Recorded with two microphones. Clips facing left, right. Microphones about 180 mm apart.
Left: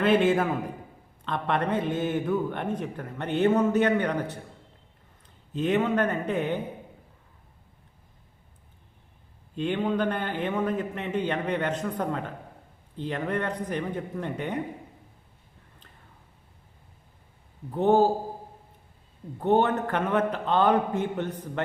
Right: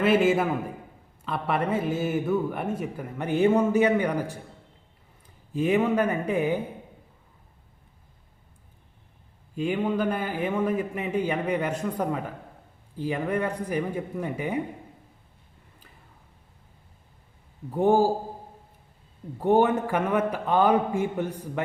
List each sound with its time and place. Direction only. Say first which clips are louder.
0.0 s a man's voice: right 1 dB; 5° right (ahead or behind)
5.5 s a man's voice: right 2 dB; 10° right (ahead or behind)
9.6 s a man's voice: right 1 dB; 5° right (ahead or behind)
17.7 s a man's voice: even; 10° right (ahead or behind)
19.4 s a man's voice: right 2 dB; 10° right (ahead or behind)